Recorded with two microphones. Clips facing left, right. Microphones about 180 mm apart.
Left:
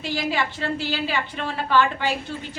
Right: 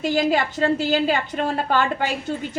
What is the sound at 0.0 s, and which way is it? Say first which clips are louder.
A woman's voice: right 6 dB; 45° right (ahead or behind).